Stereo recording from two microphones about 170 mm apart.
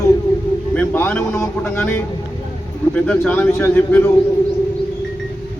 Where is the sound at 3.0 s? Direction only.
5° left (ahead or behind).